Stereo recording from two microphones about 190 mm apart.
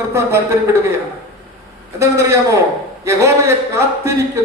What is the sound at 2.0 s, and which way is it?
A man's voice, 15° right (ahead or behind).